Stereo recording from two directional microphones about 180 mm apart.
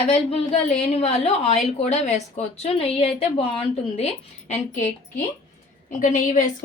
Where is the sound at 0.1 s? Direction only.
35° left (ahead or behind).